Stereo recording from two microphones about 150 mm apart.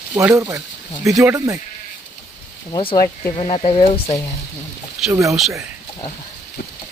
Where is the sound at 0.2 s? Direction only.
20° right (ahead or behind).